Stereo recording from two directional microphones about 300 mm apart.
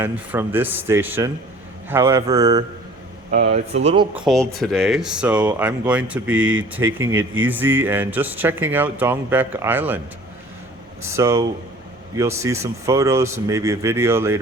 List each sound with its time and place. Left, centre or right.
0.0 s speech: centre
3.3 s speech: right
4.1 s speech: centre
11.1 s speech: centre